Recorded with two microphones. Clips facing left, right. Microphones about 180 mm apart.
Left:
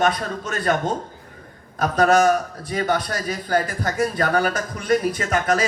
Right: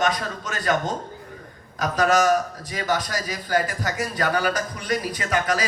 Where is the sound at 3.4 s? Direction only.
30° left (ahead or behind).